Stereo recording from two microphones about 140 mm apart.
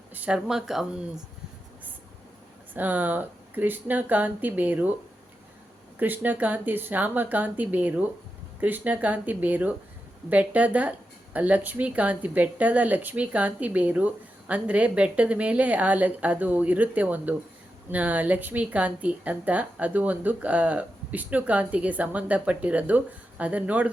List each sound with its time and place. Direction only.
0.1 s speech: 10° right (ahead or behind)
2.7 s speech: 10° right (ahead or behind)
6.0 s speech: 10° right (ahead or behind)